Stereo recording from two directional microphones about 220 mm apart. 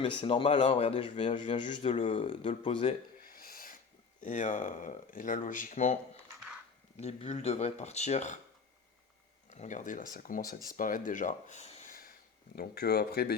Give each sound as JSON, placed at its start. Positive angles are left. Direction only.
{"t": 0.0, "sound": "a man's voice", "side_deg": 25}
{"t": 3.2, "sound": "a sound", "side_deg": 40}
{"t": 4.2, "sound": "speech", "side_deg": 35}
{"t": 7.0, "sound": "a man's voice", "side_deg": 30}
{"t": 9.5, "sound": "speech", "side_deg": 35}
{"t": 12.5, "sound": "speech", "side_deg": 45}